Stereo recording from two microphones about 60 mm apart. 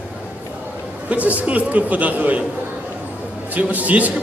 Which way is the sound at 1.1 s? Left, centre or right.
Right.